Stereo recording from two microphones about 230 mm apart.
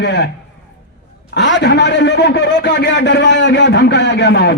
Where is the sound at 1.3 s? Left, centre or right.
Left.